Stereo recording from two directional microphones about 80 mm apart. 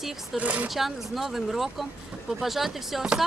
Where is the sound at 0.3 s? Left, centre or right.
Centre.